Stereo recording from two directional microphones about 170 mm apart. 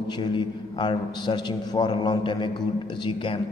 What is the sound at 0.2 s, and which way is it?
A man's voice, 25° left (ahead or behind).